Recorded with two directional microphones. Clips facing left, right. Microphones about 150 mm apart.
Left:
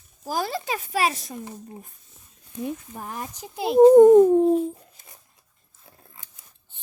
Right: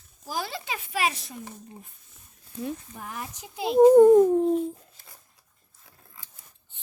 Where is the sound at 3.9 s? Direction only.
20° left (ahead or behind).